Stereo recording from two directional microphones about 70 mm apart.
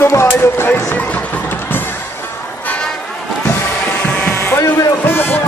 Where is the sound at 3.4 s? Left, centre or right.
Left.